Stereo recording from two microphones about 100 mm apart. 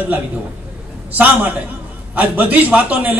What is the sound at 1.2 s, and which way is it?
A woman's voice, 20° right (ahead or behind).